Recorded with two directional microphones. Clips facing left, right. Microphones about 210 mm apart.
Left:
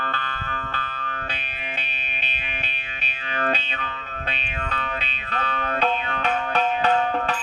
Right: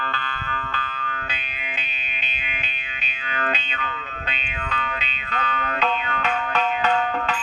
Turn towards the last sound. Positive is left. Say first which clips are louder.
# left 1 dB
turn(degrees=40)  # may be behind; listen again after turning